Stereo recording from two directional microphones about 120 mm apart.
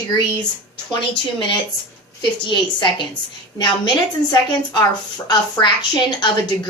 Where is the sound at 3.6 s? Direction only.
40° left (ahead or behind).